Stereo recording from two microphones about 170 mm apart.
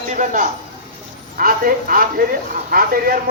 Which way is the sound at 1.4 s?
55° right (ahead or behind).